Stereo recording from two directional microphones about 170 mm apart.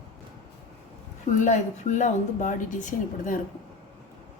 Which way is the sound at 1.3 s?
45° left (ahead or behind).